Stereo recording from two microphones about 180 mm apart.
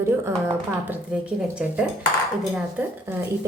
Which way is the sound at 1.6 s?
5° right (ahead or behind).